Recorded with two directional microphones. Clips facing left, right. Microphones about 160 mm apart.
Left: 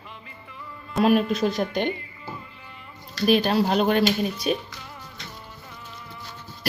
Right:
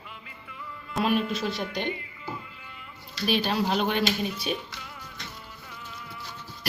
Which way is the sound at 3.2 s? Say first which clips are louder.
Left 6 dB; 45° left (ahead or behind).